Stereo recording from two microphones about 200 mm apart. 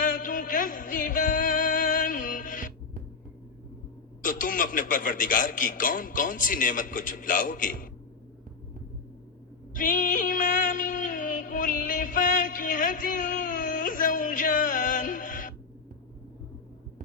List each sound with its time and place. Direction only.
0.0 s music: 40° left (ahead or behind)
4.2 s a man's voice: 40° left (ahead or behind)
9.7 s music: 40° left (ahead or behind)